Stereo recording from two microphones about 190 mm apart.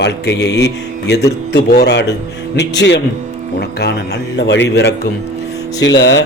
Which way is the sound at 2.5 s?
65° left (ahead or behind).